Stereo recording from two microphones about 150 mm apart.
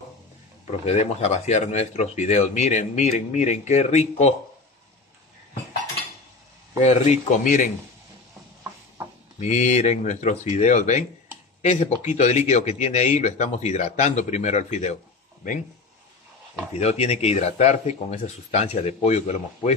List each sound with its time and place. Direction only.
0.8 s speech: 45° left (ahead or behind)
6.8 s speech: 50° left (ahead or behind)
9.4 s speech: 45° left (ahead or behind)
16.7 s speech: 45° left (ahead or behind)